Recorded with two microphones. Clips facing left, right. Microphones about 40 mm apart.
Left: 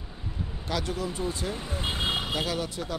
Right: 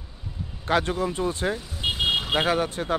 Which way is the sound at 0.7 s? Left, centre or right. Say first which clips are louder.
Right 8 dB; right.